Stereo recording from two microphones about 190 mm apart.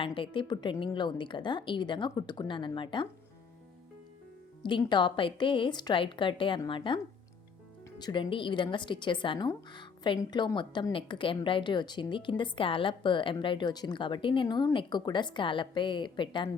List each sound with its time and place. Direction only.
0.0 s speech: 30° left (ahead or behind)
4.6 s speech: 25° left (ahead or behind)